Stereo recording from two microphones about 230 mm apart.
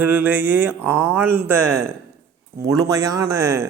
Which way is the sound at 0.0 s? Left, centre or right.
Centre.